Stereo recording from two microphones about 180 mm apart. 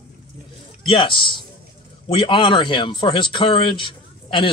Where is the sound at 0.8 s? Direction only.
30° left (ahead or behind).